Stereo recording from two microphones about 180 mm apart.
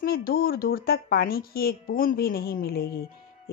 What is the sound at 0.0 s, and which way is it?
Speech, 55° left (ahead or behind).